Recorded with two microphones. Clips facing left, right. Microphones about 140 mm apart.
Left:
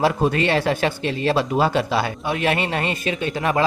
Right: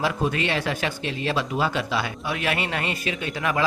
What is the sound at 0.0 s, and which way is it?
Speech, 35° left (ahead or behind).